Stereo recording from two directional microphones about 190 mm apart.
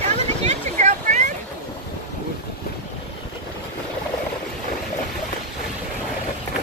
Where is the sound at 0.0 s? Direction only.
35° right (ahead or behind).